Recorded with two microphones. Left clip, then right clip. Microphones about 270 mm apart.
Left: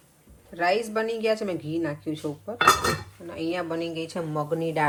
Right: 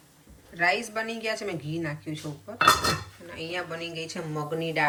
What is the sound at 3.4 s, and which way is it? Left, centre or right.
A woman's voice, centre.